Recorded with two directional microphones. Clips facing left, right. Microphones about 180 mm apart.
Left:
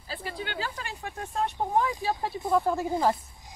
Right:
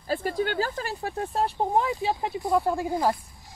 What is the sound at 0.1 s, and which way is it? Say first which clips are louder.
Speech: right 9 dB; 45° right (ahead or behind).